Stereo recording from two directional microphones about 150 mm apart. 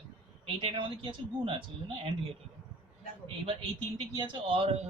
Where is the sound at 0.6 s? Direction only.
35° right (ahead or behind).